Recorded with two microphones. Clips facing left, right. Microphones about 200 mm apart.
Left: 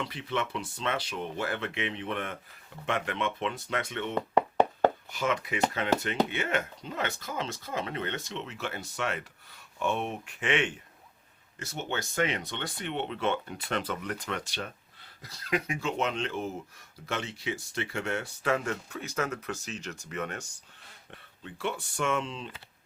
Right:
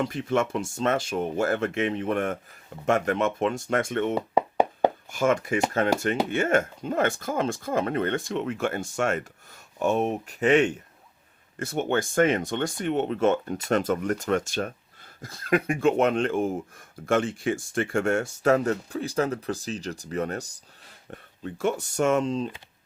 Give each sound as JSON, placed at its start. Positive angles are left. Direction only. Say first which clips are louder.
{"t": 0.0, "sound": "speech", "louder": "right 8 dB", "side_deg": -45}
{"t": 4.1, "sound": "a sound", "louder": "right 2 dB", "side_deg": -10}
{"t": 5.1, "sound": "speech", "louder": "right 7 dB", "side_deg": -45}
{"t": 11.6, "sound": "speech", "louder": "right 9 dB", "side_deg": -55}